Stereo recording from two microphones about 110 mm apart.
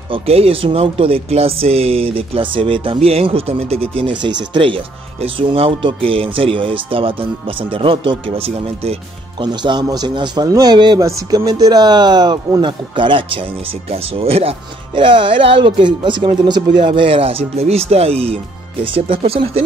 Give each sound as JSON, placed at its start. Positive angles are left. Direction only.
{"t": 0.1, "sound": "speech", "side_deg": -60}
{"t": 9.4, "sound": "a man's voice", "side_deg": -45}
{"t": 15.0, "sound": "speech", "side_deg": -50}